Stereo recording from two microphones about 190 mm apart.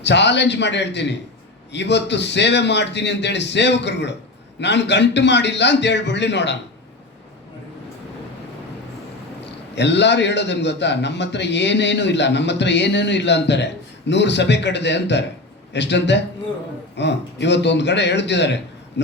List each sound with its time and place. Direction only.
0.0 s a man's voice: 65° left (ahead or behind)
9.7 s a man's voice: 65° left (ahead or behind)